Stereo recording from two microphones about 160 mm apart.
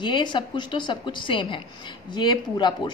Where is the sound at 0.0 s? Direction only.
30° left (ahead or behind).